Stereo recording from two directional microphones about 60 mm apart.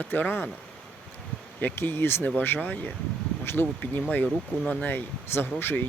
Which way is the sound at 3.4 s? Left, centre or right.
Left.